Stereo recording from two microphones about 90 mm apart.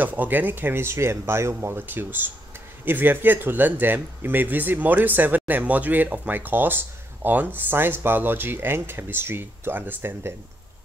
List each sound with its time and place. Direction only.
0.0 s speech: 20° right (ahead or behind)